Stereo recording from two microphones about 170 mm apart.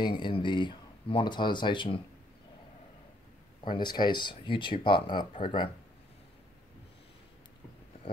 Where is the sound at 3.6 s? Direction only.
25° left (ahead or behind).